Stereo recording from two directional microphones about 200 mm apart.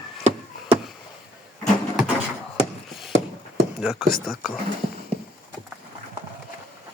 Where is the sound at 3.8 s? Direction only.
Centre (ahead or behind).